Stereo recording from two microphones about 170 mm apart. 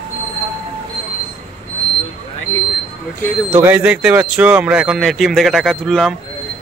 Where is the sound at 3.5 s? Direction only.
10° right (ahead or behind).